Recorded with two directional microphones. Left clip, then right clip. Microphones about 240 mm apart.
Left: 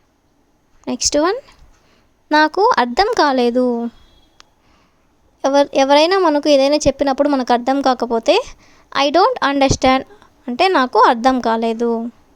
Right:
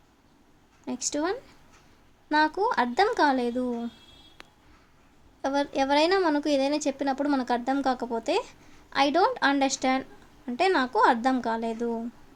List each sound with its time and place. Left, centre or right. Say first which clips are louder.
0.9 s speech: left 13 dB; left
5.4 s speech: left 13 dB; left